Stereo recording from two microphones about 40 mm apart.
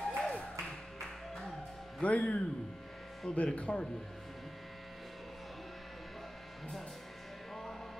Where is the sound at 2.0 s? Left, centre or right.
Left.